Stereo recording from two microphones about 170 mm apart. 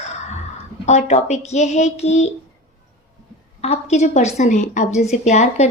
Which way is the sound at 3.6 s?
40° left (ahead or behind).